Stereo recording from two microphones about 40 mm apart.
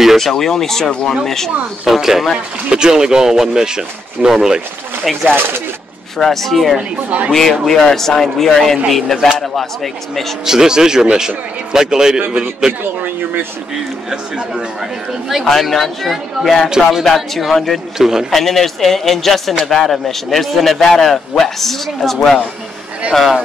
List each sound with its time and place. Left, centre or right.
0.2 s speech: centre
1.9 s speech: centre
2.7 s speech: centre
5.1 s speech: centre
6.1 s speech: centre
10.4 s speech: centre
13.0 s speech: right
14.1 s speech: right
15.2 s speech: centre
16.6 s speech: centre
17.0 s speech: centre
17.9 s speech: centre
18.3 s speech: centre
23.1 s speech: centre